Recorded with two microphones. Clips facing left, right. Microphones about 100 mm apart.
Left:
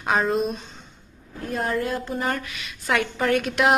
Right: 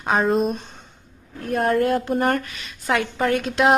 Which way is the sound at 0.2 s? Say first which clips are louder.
Right 3 dB; centre (ahead or behind).